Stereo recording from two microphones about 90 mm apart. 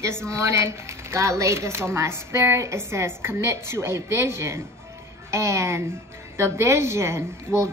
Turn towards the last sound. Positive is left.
turn(degrees=-30)  # may be behind; listen again after turning